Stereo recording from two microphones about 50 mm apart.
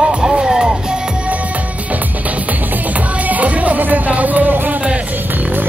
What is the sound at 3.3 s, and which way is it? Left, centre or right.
Music, right.